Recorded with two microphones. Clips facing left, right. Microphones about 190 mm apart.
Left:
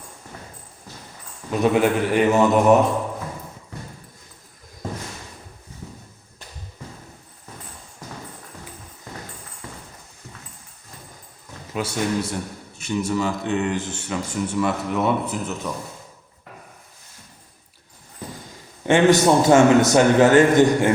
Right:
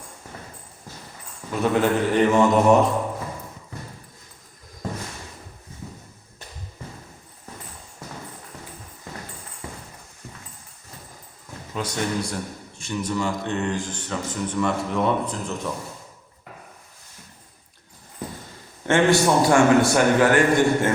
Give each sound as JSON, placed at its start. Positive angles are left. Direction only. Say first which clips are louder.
{"t": 1.5, "sound": "speech", "louder": "left 2 dB", "side_deg": 15}
{"t": 11.7, "sound": "speech", "louder": "left 3 dB", "side_deg": 5}
{"t": 18.9, "sound": "a man's voice", "louder": "left 3 dB", "side_deg": 20}